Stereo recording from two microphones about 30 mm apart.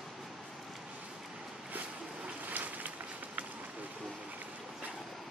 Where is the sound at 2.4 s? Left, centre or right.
Right.